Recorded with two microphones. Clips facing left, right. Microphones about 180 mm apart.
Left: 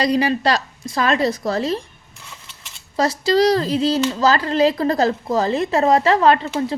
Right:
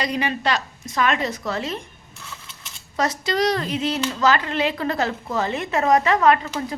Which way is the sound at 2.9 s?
30° left (ahead or behind).